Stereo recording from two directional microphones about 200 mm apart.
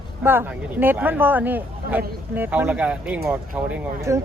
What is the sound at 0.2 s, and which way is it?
Speech, 10° right (ahead or behind).